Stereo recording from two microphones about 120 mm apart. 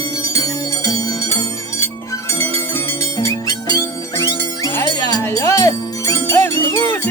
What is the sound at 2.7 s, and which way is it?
Music, 20° left (ahead or behind).